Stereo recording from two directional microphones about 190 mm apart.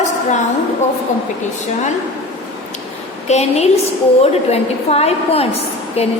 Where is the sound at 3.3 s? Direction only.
35° left (ahead or behind).